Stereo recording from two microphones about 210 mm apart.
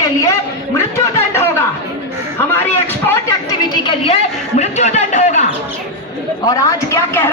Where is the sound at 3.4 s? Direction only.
20° left (ahead or behind).